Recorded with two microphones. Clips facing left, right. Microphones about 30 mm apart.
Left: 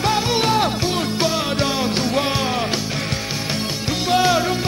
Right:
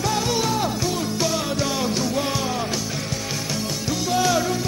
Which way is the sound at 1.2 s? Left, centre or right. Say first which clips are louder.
Left 3 dB; left.